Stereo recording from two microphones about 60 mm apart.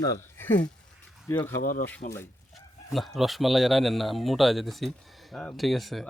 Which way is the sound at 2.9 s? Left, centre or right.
Centre.